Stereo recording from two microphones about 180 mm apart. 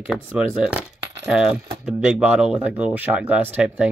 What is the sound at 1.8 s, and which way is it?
Speech, 5° right (ahead or behind).